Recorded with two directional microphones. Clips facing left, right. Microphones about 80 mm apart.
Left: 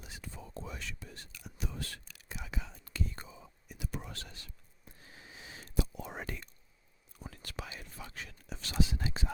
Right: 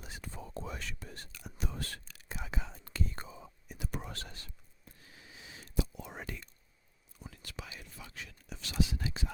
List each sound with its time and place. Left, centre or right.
0.0 s whispering: right
5.0 s whispering: left